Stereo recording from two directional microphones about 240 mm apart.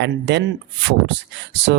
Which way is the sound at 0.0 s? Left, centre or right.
Right.